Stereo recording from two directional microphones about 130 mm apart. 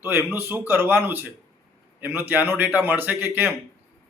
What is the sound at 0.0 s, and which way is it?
A man's voice, 20° right (ahead or behind).